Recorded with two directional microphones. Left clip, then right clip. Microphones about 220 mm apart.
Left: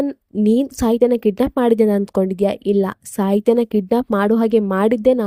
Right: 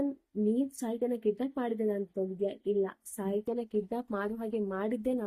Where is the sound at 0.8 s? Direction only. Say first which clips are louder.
Left 18 dB; 45° left (ahead or behind).